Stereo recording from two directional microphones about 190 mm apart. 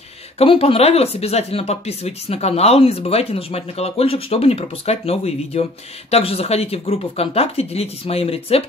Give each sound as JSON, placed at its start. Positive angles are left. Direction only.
{"t": 0.4, "sound": "speech", "side_deg": 30}